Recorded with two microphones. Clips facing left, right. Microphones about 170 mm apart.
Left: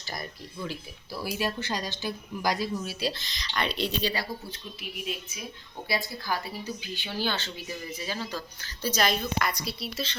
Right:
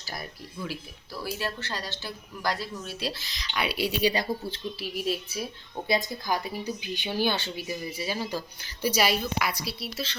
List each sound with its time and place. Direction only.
0.0 s speech: 5° right (ahead or behind)
1.1 s speech: 15° left (ahead or behind); by 4.1 s 5° right (ahead or behind)
4.1 s speech: 25° right (ahead or behind)
5.9 s speech: 20° right (ahead or behind); by 10.2 s centre (ahead or behind)